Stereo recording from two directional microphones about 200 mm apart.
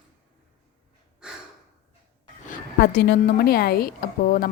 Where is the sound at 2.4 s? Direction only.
45° left (ahead or behind).